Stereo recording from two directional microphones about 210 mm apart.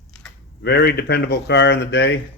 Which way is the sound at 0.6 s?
50° left (ahead or behind).